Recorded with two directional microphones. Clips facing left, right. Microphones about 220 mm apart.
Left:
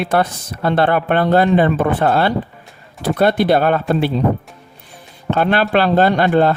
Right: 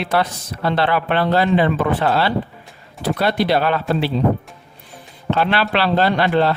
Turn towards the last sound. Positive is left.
turn(degrees=50)  # may be behind; listen again after turning